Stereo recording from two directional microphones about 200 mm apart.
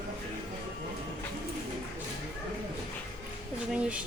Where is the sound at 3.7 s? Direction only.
5° right (ahead or behind).